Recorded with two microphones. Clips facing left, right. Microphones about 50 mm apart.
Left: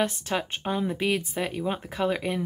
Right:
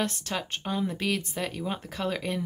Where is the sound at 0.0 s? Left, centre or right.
Centre.